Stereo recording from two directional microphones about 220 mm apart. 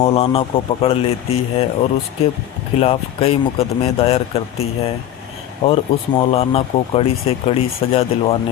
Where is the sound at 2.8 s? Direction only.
25° left (ahead or behind).